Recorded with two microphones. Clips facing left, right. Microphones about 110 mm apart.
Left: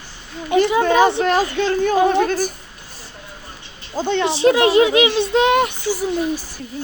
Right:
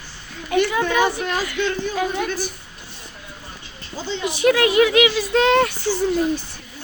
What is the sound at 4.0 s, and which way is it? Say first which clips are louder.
Speech: left 7 dB; 60° left (ahead or behind).